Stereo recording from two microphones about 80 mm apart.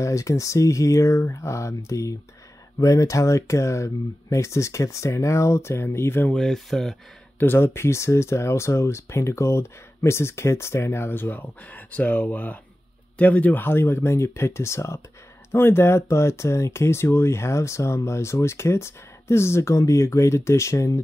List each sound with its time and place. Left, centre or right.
0.0 s speech: left
6.3 s speech: centre
7.3 s speech: left